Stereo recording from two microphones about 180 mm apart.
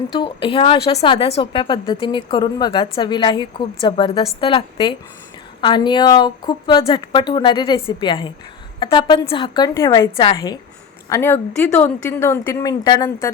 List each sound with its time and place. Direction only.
0.1 s a woman's voice: 25° left (ahead or behind)